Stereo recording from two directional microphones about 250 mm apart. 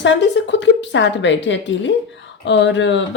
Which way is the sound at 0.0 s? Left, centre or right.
Left.